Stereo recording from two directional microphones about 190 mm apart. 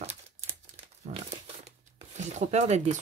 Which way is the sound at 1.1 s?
35° right (ahead or behind).